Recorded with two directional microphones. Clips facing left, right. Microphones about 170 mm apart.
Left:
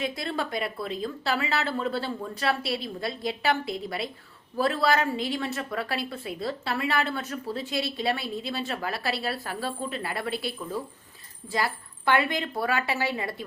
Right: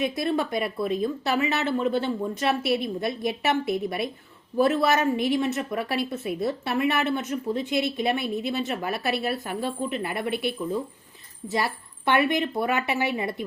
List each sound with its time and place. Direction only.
0.0 s a woman's voice: 20° right (ahead or behind)